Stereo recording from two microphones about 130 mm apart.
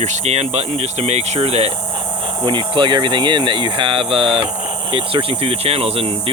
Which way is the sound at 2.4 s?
35° right (ahead or behind).